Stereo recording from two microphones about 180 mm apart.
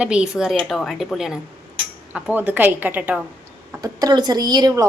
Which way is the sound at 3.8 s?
20° right (ahead or behind).